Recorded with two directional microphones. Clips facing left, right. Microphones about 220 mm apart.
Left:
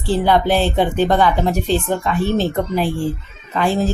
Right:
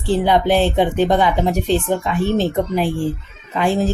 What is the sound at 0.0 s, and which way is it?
Speech, 20° right (ahead or behind).